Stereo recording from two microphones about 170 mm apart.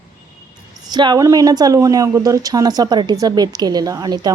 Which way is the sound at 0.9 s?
25° right (ahead or behind).